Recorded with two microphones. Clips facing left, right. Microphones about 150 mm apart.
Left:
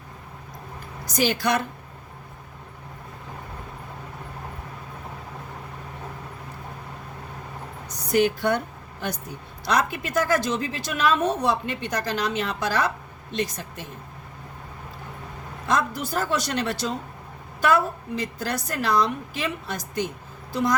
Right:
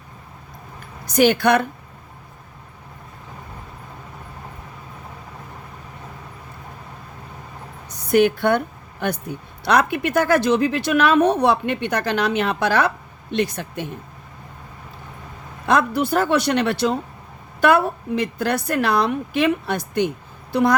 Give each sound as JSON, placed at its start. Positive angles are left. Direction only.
{"t": 1.0, "sound": "a woman's voice", "side_deg": -60}
{"t": 8.1, "sound": "a woman's voice", "side_deg": -60}
{"t": 15.6, "sound": "a woman's voice", "side_deg": -65}